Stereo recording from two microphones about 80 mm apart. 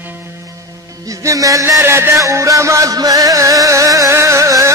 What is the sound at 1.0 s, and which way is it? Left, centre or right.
Music, right.